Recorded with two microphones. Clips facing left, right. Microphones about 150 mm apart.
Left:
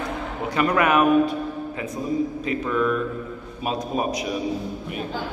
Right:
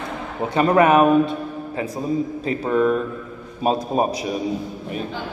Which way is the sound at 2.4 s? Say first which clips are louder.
Right 4 dB; 35° right (ahead or behind).